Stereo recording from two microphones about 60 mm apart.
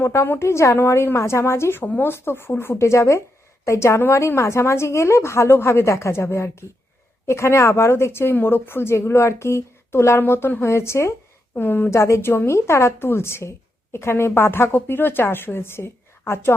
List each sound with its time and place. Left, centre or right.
0.0 s speech: left
1.8 s speech: left
10.2 s speech: left
11.5 s a woman's voice: left
11.9 s a woman's voice: left